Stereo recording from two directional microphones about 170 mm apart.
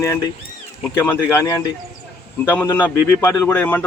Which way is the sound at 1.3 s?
20° left (ahead or behind).